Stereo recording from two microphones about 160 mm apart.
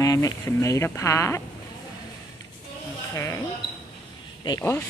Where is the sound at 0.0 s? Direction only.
20° left (ahead or behind).